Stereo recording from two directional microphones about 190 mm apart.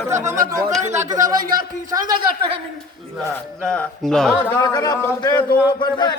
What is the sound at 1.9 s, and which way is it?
Speech, 20° right (ahead or behind).